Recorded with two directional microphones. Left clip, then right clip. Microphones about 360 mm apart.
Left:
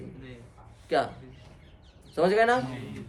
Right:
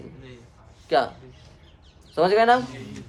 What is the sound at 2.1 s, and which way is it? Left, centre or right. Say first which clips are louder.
Speech: right 5 dB; centre.